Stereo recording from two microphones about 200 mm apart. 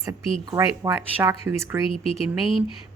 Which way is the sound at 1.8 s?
30° left (ahead or behind).